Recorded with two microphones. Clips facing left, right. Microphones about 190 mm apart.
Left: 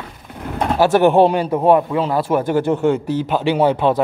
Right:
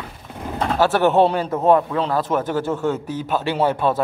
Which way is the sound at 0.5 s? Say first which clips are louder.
Left 4 dB; 15° left (ahead or behind).